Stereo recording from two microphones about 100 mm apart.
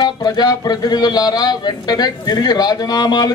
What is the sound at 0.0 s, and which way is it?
Speech, 45° left (ahead or behind).